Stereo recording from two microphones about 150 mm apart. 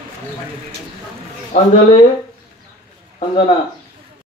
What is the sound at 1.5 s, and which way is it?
Speech, 45° left (ahead or behind).